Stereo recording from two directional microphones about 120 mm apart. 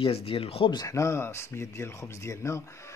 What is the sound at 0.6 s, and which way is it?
Speech, 30° left (ahead or behind).